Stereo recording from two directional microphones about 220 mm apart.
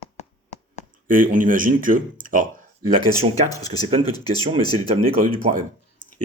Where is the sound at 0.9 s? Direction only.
40° right (ahead or behind).